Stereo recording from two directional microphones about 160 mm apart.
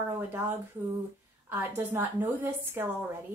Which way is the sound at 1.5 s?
10° right (ahead or behind).